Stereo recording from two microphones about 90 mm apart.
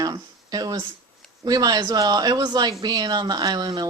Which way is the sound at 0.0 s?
45° right (ahead or behind).